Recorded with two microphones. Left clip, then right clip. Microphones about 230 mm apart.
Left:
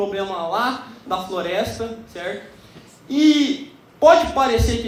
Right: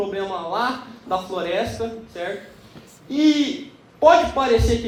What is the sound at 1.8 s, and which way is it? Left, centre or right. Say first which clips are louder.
Speech: right 1 dB; left.